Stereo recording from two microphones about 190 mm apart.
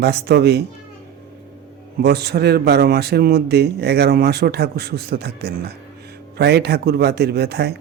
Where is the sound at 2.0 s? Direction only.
60° right (ahead or behind).